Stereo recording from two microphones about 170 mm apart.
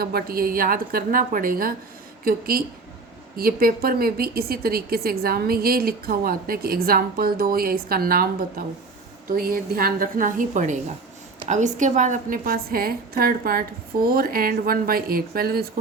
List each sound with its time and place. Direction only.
0.0 s a woman's voice: 65° right (ahead or behind)